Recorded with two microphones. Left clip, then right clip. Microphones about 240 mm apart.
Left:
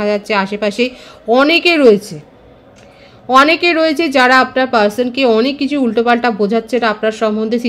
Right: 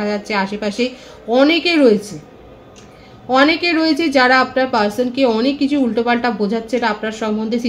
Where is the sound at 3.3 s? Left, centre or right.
Left.